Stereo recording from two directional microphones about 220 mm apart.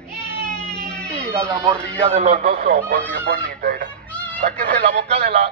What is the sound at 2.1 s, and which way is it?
Radio, 30° right (ahead or behind).